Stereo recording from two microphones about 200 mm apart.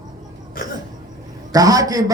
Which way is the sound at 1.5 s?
20° right (ahead or behind).